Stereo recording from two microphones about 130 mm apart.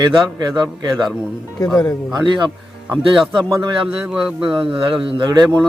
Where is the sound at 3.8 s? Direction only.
5° right (ahead or behind).